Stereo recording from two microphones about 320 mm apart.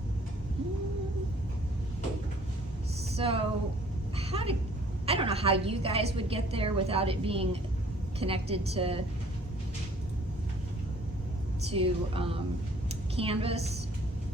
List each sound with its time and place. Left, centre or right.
3.2 s a woman's voice: centre
4.2 s a sound: centre
5.0 s a woman's voice: centre
11.7 s a woman's voice: centre